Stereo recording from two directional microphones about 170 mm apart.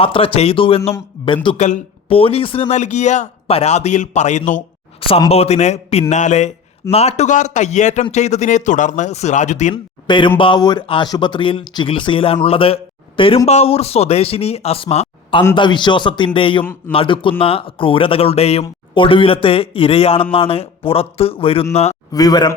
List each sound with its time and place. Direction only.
0.0 s a man's voice: 30° left (ahead or behind)
1.5 s a man's voice: 40° left (ahead or behind)
4.9 s a man's voice: 35° left (ahead or behind)
9.7 s speech: 30° left (ahead or behind)
22.1 s speech: 20° left (ahead or behind)